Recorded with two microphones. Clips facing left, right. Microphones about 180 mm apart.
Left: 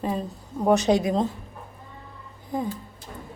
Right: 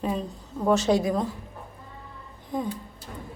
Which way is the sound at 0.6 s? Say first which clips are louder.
Left 2 dB; 20° left (ahead or behind).